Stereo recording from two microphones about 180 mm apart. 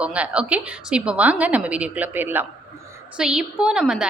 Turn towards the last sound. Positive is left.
turn(degrees=-5)  # may be behind; listen again after turning